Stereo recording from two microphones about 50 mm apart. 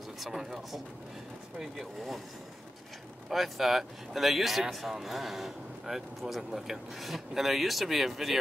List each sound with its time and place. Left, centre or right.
0.2 s speech: centre
3.3 s speech: centre